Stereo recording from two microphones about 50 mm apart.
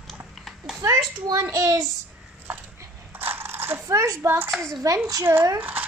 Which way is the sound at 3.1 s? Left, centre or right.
Right.